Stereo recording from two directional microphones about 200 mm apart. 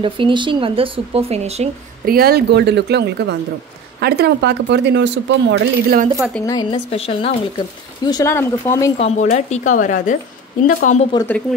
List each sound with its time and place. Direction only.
0.0 s speech: 25° right (ahead or behind)
2.0 s speech: 50° right (ahead or behind)
6.4 s a woman's voice: 20° left (ahead or behind)
8.9 s speech: 30° left (ahead or behind)
11.1 s speech: 10° left (ahead or behind)